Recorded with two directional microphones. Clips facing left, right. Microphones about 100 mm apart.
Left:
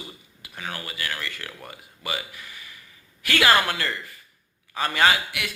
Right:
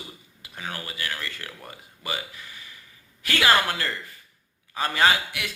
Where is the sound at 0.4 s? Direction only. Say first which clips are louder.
Left 1 dB; 25° right (ahead or behind).